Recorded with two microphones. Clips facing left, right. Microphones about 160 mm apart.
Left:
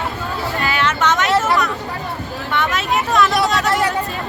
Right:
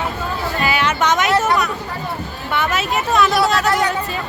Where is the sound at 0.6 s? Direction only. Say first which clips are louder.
Right 1 dB; 15° right (ahead or behind).